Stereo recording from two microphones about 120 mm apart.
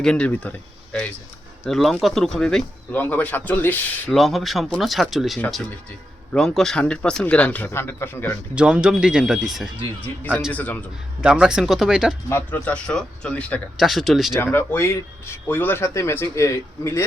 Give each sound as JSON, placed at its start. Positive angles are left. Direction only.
{"t": 0.0, "sound": "speech", "side_deg": 10}
{"t": 1.6, "sound": "speech", "side_deg": 0}
{"t": 2.9, "sound": "speech", "side_deg": 15}
{"t": 4.1, "sound": "speech", "side_deg": 0}
{"t": 8.5, "sound": "speech", "side_deg": -10}
{"t": 10.0, "sound": "speech", "side_deg": 15}
{"t": 11.2, "sound": "speech", "side_deg": -5}
{"t": 12.3, "sound": "speech", "side_deg": 20}
{"t": 13.7, "sound": "speech", "side_deg": 0}
{"t": 14.3, "sound": "speech", "side_deg": 20}